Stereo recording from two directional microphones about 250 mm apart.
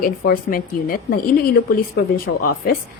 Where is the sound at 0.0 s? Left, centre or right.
Left.